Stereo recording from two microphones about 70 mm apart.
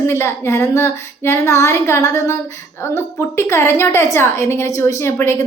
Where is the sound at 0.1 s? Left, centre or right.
Left.